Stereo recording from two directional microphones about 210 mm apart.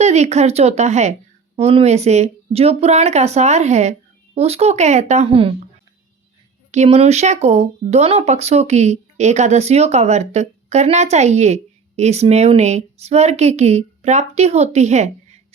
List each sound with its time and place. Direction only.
0.0 s speech: 30° right (ahead or behind)
6.7 s speech: 30° right (ahead or behind)